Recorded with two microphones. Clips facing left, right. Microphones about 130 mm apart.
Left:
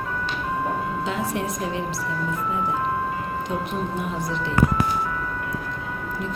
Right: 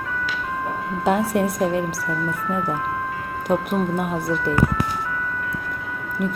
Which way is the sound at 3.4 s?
55° right (ahead or behind).